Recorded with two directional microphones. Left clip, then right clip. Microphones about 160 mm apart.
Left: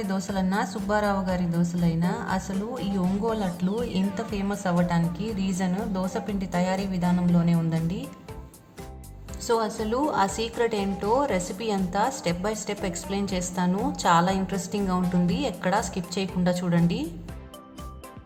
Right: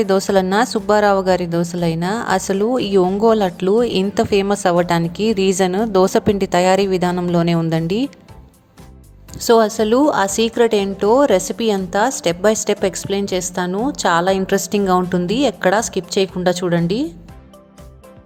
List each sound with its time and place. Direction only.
0.0 s a woman's voice: 50° right (ahead or behind)
9.4 s a woman's voice: 45° right (ahead or behind)